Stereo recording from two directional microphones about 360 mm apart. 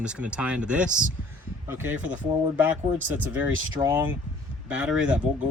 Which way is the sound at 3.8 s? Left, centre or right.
Centre.